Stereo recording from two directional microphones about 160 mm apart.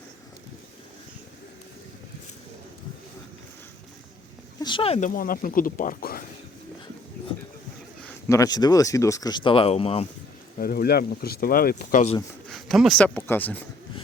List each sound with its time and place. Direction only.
4.6 s speech: 35° left (ahead or behind)
4.9 s speech: 55° left (ahead or behind)
8.3 s speech: 20° left (ahead or behind); by 10.1 s 40° left (ahead or behind)
10.6 s speech: 70° left (ahead or behind)
12.5 s speech: centre (ahead or behind)